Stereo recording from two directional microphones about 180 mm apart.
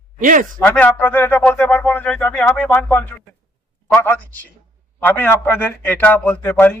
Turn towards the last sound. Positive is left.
turn(degrees=10)  # may be behind; listen again after turning